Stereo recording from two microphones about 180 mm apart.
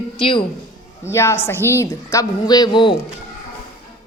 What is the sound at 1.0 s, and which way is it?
A woman's voice, 15° left (ahead or behind).